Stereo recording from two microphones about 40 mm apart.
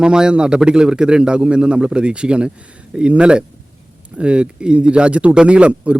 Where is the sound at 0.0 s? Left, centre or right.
Centre.